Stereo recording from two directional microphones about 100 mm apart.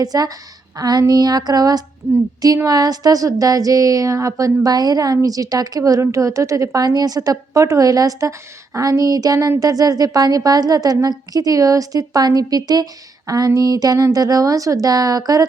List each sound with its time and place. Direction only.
0.0 s speech: 40° right (ahead or behind)